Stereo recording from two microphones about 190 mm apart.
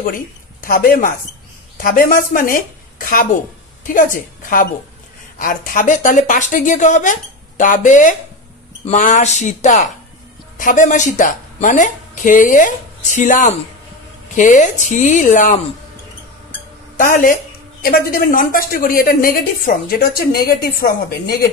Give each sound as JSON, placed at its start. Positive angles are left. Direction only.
{"t": 0.0, "sound": "a woman's voice", "side_deg": 45}
{"t": 16.9, "sound": "a woman's voice", "side_deg": 45}